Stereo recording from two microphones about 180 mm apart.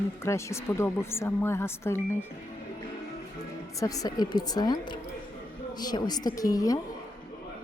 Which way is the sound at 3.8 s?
20° left (ahead or behind).